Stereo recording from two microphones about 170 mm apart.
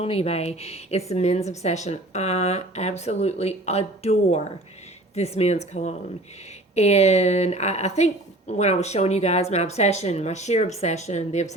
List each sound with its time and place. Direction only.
0.0 s a woman's voice: 35° left (ahead or behind)